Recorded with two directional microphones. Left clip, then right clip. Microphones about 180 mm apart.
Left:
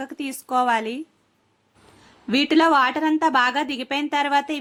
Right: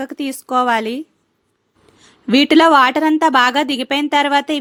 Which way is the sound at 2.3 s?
35° right (ahead or behind).